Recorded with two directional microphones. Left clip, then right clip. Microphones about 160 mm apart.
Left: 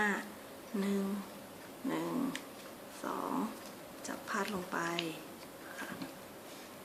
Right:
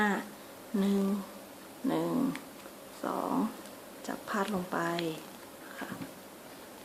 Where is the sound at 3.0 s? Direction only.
35° right (ahead or behind).